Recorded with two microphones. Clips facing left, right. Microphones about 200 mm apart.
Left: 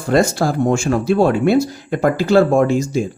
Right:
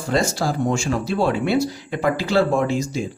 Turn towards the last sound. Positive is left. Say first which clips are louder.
# left 5 dB
turn(degrees=45)  # may be behind; listen again after turning